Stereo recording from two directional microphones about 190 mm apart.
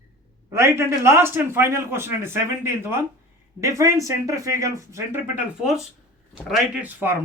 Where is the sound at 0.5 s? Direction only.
15° right (ahead or behind).